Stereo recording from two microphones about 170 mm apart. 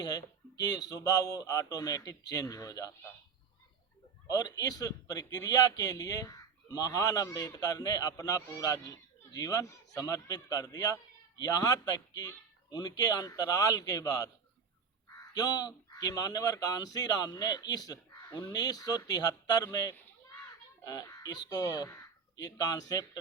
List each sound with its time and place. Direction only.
0.0 s a man's voice: 20° left (ahead or behind)
4.3 s a man's voice: 20° left (ahead or behind)
15.3 s a man's voice: 20° left (ahead or behind)
18.5 s a man's voice: 20° left (ahead or behind)